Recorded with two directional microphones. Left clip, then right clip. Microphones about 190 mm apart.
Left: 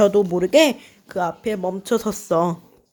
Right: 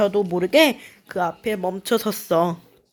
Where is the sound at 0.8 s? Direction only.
5° right (ahead or behind).